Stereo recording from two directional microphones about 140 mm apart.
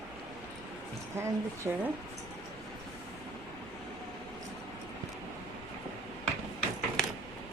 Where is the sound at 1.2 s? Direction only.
20° right (ahead or behind).